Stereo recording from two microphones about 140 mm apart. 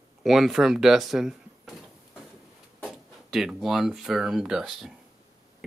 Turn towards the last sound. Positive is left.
turn(degrees=-5)  # may be behind; listen again after turning